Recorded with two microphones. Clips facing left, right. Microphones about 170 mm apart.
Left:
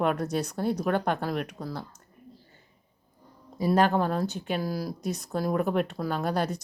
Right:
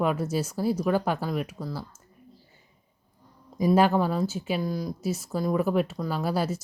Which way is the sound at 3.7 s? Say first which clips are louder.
Right 1 dB; 5° right (ahead or behind).